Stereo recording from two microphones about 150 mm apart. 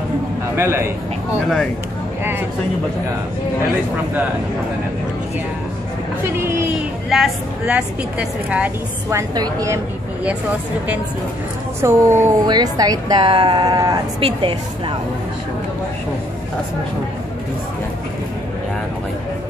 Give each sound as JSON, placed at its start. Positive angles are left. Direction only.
{"t": 0.6, "sound": "a woman's voice", "side_deg": -15}
{"t": 6.2, "sound": "speech", "side_deg": -15}
{"t": 7.1, "sound": "a woman's voice", "side_deg": -5}
{"t": 9.3, "sound": "a woman's voice", "side_deg": -25}
{"t": 11.8, "sound": "a woman's voice", "side_deg": -20}